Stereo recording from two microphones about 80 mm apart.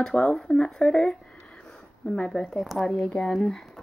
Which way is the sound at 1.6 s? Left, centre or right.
Centre.